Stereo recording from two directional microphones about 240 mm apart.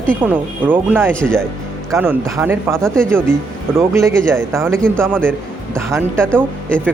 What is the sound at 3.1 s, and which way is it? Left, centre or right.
Speech, centre.